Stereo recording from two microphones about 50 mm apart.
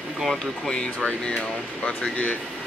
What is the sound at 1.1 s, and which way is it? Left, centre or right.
Speech, left.